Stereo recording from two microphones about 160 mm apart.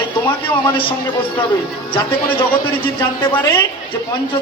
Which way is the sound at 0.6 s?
30° left (ahead or behind).